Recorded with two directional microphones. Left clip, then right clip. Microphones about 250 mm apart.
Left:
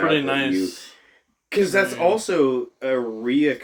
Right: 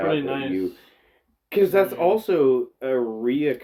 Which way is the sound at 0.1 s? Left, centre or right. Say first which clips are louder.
Left 4 dB; left.